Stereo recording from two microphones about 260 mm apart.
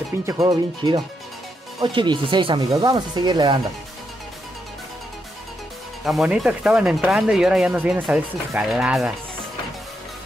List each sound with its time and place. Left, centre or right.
0.3 s speech: centre
6.0 s speech: centre